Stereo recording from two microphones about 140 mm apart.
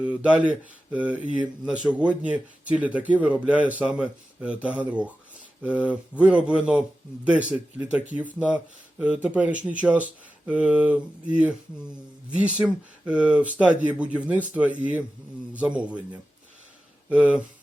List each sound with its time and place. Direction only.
0.0 s speech: 10° right (ahead or behind)
17.1 s speech: 10° right (ahead or behind)